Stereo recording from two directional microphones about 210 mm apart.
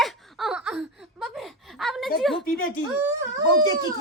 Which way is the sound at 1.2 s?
Centre (ahead or behind).